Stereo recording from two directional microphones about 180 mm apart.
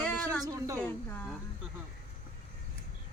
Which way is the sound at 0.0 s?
10° left (ahead or behind).